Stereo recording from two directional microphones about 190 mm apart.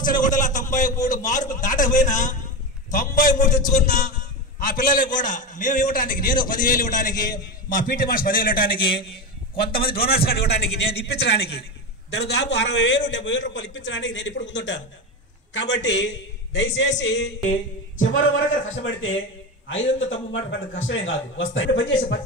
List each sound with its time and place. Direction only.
0.0 s a sound: 45° left (ahead or behind)
1.0 s a man's voice: 40° left (ahead or behind); by 17.3 s 65° left (ahead or behind)
18.1 s a man's voice: 90° left